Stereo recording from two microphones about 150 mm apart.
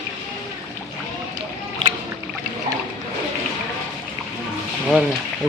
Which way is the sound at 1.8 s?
35° right (ahead or behind).